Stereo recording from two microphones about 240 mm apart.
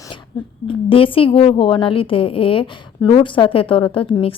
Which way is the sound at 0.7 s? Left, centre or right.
Left.